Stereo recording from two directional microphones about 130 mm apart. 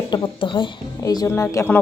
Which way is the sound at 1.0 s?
25° left (ahead or behind).